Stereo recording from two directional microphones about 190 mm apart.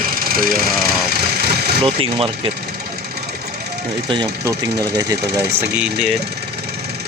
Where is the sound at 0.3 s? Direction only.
50° right (ahead or behind).